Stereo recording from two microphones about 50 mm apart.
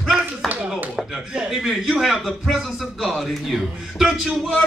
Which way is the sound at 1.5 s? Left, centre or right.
Centre.